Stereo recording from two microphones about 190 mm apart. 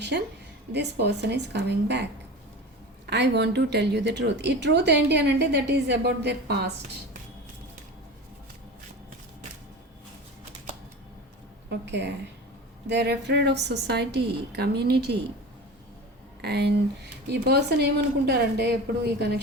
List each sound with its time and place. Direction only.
0.7 s a woman's voice: 60° right (ahead or behind)
3.1 s a woman's voice: 60° right (ahead or behind)
11.7 s a woman's voice: 65° right (ahead or behind)
16.4 s a woman's voice: 60° right (ahead or behind)